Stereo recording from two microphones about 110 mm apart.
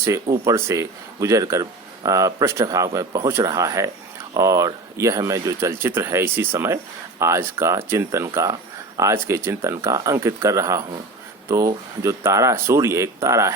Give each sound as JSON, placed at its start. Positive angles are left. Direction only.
{"t": 0.0, "sound": "speech", "side_deg": -30}